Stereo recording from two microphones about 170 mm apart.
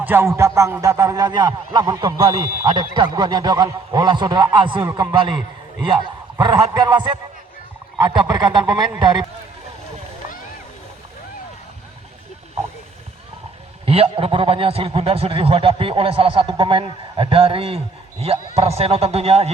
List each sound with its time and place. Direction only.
0.0 s speech: 10° right (ahead or behind); by 2.4 s 30° right (ahead or behind)
2.4 s speech: 15° right (ahead or behind)
2.6 s speech: 25° right (ahead or behind)
13.8 s a man's voice: 35° right (ahead or behind)